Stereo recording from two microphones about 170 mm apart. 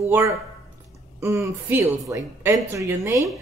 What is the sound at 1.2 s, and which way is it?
A woman's voice, 15° right (ahead or behind).